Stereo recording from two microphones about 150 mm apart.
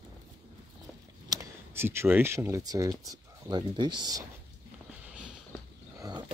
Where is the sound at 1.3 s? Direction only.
20° right (ahead or behind).